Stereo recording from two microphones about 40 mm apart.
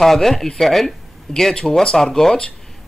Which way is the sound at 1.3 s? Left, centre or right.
Centre.